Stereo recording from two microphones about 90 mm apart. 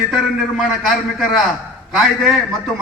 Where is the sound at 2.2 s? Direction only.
Centre (ahead or behind).